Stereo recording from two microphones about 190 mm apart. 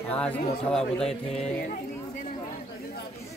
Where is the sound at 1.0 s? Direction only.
35° left (ahead or behind).